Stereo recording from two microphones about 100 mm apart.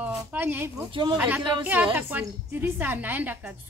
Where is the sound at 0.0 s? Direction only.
20° right (ahead or behind).